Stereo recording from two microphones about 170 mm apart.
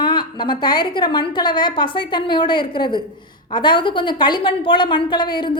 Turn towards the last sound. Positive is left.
turn(degrees=25)  # may be behind; listen again after turning